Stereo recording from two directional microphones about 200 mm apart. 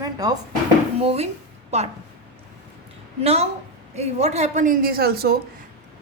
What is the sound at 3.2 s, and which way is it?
A man's voice, 30° right (ahead or behind).